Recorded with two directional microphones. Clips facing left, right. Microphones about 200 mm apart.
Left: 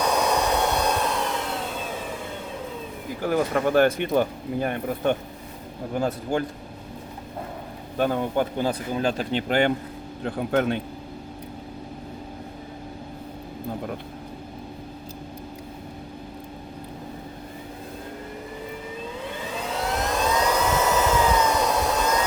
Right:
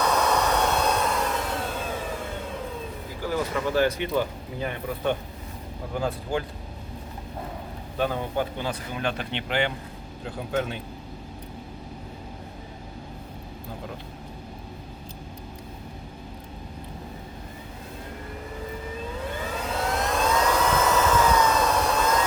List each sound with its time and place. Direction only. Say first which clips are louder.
0.0 s aircraft: left 1 dB; 10° left (ahead or behind)
3.2 s speech: left 4 dB; 55° left (ahead or behind)
7.9 s speech: left 4 dB; 45° left (ahead or behind)
10.2 s speech: left 6 dB; 60° left (ahead or behind)
20.0 s vehicle: even; centre (ahead or behind)